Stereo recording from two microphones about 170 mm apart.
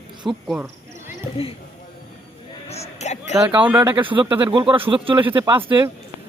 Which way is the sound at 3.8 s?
15° right (ahead or behind).